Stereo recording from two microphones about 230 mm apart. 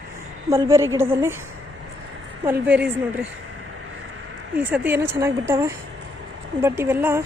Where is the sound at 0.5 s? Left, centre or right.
Centre.